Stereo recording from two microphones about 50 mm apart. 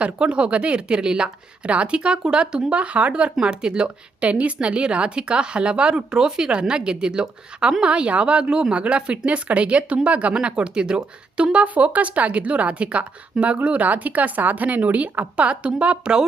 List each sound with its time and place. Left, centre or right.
0.0 s a woman's voice: right